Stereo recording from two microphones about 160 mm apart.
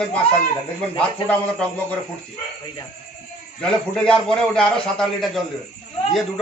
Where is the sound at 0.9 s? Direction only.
10° left (ahead or behind).